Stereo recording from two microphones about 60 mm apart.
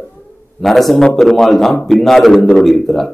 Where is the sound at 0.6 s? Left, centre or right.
Centre.